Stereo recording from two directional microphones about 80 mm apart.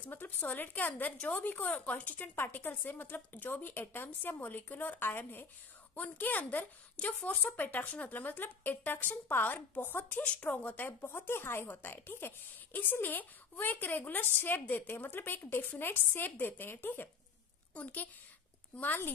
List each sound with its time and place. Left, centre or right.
0.0 s speech: left
10.2 s speech: centre